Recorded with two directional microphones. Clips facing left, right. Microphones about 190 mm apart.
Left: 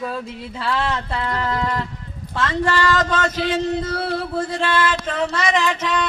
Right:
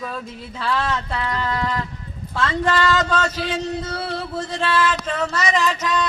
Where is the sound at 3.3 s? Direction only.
50° left (ahead or behind).